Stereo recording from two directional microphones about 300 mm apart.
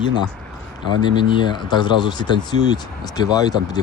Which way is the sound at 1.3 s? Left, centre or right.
Centre.